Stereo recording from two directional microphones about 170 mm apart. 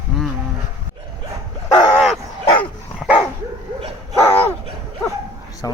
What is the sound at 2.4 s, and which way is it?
Dog, 20° left (ahead or behind).